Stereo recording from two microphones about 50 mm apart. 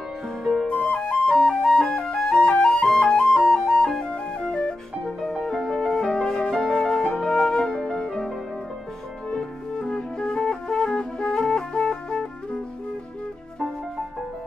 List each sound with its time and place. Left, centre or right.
0.4 s flute: centre
0.7 s flute: left
5.4 s music: centre
7.2 s flute: centre
9.3 s music: centre